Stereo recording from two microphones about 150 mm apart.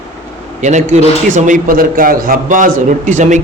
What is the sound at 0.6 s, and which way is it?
A man's voice, 50° right (ahead or behind).